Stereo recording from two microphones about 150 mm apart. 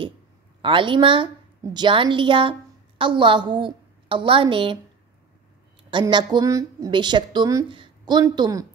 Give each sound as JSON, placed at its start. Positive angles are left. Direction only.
{"t": 0.6, "sound": "a woman's voice", "side_deg": -35}
{"t": 5.9, "sound": "a woman's voice", "side_deg": -30}